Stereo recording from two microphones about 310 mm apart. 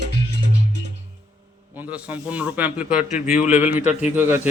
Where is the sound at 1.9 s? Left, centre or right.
Centre.